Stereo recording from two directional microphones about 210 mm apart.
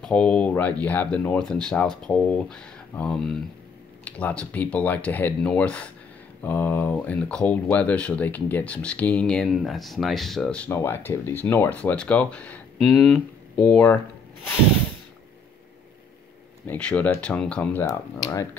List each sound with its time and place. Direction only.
0.0 s speech: 5° left (ahead or behind)
16.6 s speech: 5° left (ahead or behind)
17.8 s speech: 15° left (ahead or behind)